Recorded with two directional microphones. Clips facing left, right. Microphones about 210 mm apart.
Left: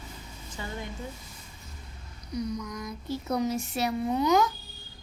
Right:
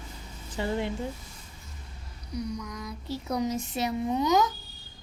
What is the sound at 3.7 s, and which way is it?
Speech, 20° right (ahead or behind).